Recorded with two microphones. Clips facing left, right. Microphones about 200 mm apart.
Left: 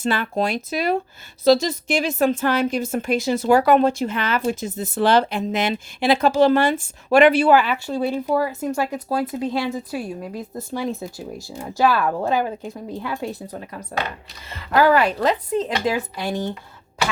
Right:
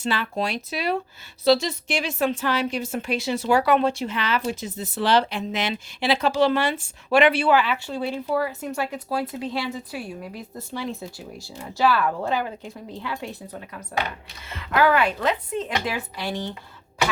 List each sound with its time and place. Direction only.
0.0 s a woman's voice: 50° left (ahead or behind)